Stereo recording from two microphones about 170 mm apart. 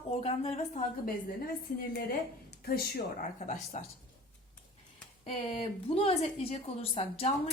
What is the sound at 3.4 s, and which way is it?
Speech, 45° left (ahead or behind).